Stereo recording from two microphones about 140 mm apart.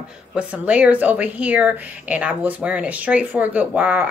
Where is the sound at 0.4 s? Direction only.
10° right (ahead or behind).